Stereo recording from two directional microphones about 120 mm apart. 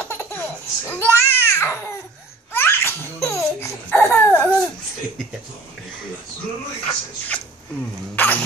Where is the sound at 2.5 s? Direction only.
20° left (ahead or behind).